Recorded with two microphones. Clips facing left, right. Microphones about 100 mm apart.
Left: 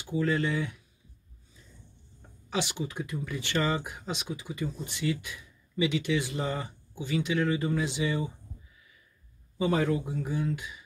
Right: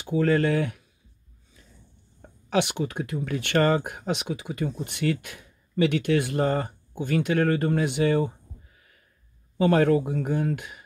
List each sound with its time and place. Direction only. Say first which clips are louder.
0.0 s speech: right 6 dB; 60° right (ahead or behind)
2.5 s speech: right 7 dB; 60° right (ahead or behind)